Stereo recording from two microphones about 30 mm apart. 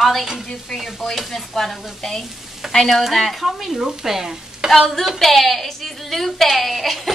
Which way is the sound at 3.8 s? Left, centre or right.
Centre.